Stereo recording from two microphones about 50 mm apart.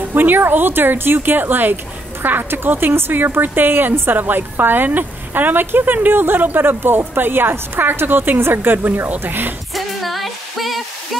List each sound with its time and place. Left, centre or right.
0.1 s a woman's voice: right
9.8 s music: centre